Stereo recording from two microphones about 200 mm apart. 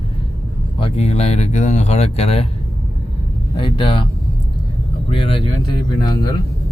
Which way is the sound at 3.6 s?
25° left (ahead or behind).